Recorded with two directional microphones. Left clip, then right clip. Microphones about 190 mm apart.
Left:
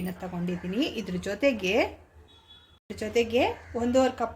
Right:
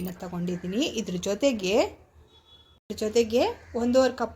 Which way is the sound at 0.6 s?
30° right (ahead or behind).